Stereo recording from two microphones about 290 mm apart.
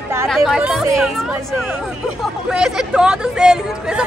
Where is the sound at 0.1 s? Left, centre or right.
Centre.